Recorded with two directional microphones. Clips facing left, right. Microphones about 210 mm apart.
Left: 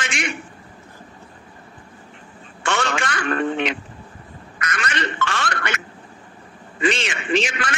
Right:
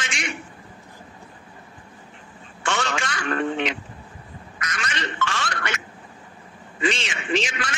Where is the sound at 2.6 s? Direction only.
60° left (ahead or behind).